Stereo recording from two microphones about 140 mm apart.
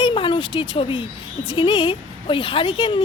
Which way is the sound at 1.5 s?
35° left (ahead or behind).